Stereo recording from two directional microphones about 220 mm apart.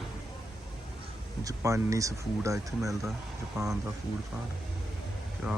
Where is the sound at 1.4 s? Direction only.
15° right (ahead or behind).